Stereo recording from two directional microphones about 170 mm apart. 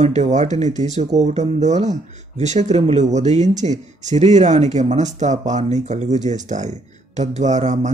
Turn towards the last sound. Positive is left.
turn(degrees=-45)  # may be behind; listen again after turning